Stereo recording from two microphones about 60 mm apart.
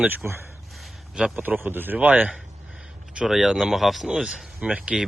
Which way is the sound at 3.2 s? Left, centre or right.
Centre.